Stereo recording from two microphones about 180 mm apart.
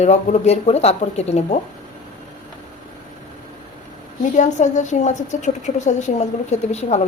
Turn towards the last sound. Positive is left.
turn(degrees=40)  # may be behind; listen again after turning